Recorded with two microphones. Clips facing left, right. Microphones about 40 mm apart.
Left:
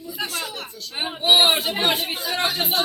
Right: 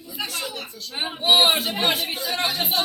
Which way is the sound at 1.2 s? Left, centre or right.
Centre.